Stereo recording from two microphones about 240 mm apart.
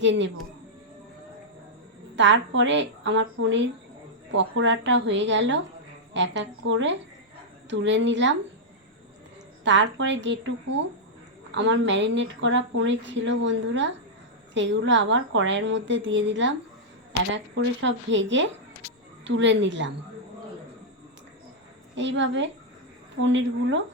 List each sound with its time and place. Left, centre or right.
0.0 s speech: right
2.1 s speech: right
9.6 s speech: right
11.5 s speech: right
21.9 s speech: right